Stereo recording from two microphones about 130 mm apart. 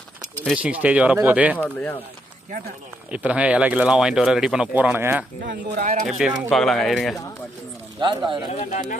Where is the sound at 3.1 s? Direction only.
10° right (ahead or behind).